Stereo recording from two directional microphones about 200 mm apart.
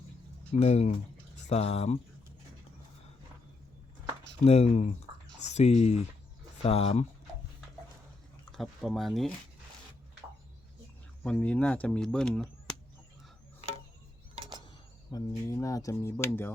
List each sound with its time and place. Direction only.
0.5 s speech: 30° left (ahead or behind)
4.4 s speech: 30° left (ahead or behind)
8.5 s speech: centre (ahead or behind)
11.2 s speech: 5° left (ahead or behind)
15.1 s speech: 15° left (ahead or behind)